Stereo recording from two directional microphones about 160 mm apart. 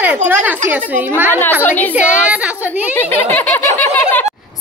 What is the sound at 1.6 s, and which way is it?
Speech, 10° left (ahead or behind).